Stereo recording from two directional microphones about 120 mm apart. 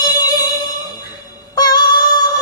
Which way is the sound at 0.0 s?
35° left (ahead or behind).